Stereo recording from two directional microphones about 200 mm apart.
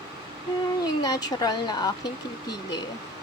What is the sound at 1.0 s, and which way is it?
Speech, 20° left (ahead or behind).